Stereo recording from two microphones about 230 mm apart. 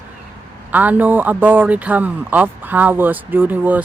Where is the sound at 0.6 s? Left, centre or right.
Centre.